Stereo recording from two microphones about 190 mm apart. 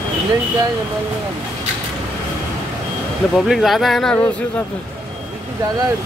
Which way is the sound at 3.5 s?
Centre (ahead or behind).